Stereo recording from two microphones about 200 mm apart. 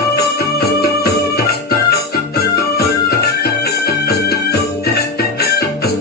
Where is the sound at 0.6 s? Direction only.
50° left (ahead or behind).